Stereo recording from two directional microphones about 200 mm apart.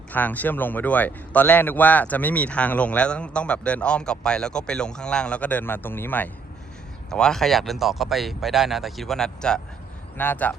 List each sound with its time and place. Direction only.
0.1 s a man's voice: 10° left (ahead or behind)